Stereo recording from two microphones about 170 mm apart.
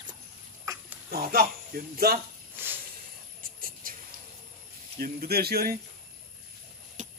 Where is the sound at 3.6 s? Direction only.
55° right (ahead or behind).